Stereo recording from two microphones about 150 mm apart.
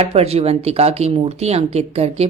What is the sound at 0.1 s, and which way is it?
Speech, 45° right (ahead or behind).